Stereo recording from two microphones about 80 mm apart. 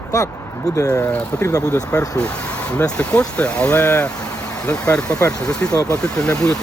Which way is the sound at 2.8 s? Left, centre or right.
Centre.